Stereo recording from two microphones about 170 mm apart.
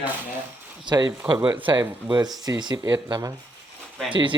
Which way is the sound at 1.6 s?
25° right (ahead or behind).